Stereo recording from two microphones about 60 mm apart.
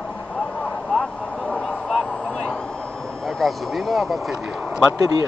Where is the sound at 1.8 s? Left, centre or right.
Centre.